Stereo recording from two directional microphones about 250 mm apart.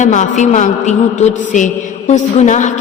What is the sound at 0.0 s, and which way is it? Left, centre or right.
A man's voice, left.